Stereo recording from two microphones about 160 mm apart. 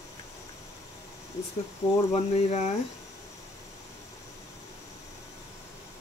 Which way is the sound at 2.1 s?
40° left (ahead or behind).